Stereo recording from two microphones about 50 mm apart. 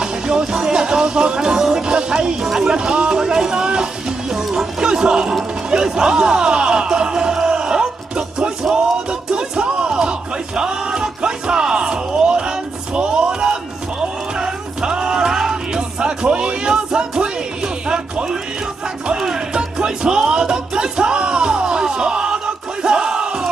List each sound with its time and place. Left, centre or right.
0.0 s music: centre
5.7 s speech: centre
9.3 s music: centre
22.8 s battle cry: centre